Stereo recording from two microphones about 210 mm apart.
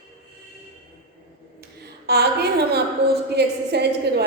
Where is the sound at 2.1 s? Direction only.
50° right (ahead or behind).